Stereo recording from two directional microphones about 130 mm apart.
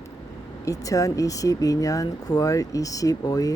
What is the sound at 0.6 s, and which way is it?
Speech, 25° left (ahead or behind).